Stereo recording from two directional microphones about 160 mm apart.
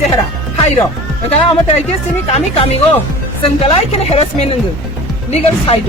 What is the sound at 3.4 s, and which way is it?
Speech, 35° left (ahead or behind).